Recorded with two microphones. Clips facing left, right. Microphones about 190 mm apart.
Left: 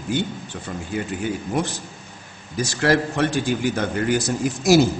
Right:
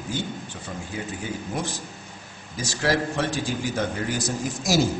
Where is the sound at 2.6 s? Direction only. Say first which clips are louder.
Left 5 dB; 60° left (ahead or behind).